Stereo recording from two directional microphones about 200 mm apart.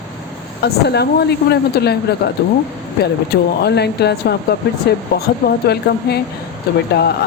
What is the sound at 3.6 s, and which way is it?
Speech, 55° left (ahead or behind).